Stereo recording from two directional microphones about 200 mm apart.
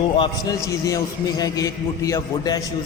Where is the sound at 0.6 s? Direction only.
15° left (ahead or behind).